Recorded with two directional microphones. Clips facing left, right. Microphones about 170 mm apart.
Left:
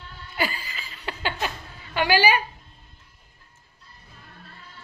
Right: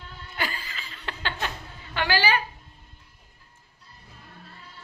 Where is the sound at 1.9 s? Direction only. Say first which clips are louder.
Left 4 dB; 15° left (ahead or behind).